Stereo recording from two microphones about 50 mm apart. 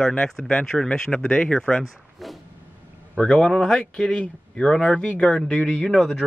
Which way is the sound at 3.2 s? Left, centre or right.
Left.